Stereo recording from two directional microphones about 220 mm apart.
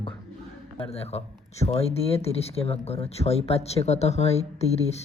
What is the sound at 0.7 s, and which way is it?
Speech, 30° left (ahead or behind).